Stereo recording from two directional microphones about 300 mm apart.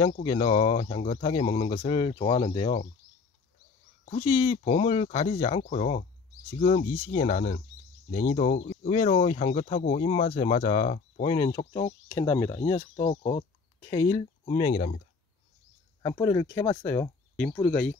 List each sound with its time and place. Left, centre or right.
0.2 s speech: centre
4.0 s speech: centre
16.0 s speech: centre